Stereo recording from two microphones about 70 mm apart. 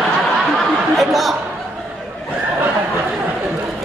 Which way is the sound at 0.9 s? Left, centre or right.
Centre.